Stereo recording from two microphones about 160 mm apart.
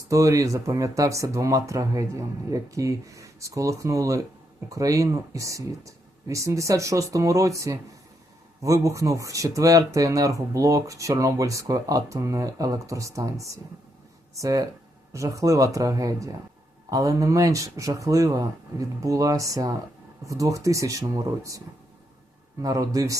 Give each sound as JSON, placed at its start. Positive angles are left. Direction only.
{"t": 0.1, "sound": "speech", "side_deg": -20}
{"t": 22.6, "sound": "speech", "side_deg": -20}